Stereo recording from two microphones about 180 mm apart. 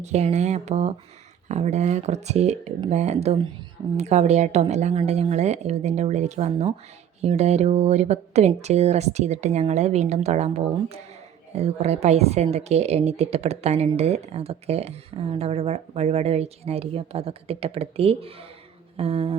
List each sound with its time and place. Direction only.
0.0 s a woman's voice: 35° right (ahead or behind)